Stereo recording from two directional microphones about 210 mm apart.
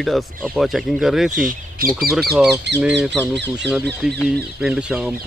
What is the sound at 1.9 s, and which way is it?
Speech, centre (ahead or behind).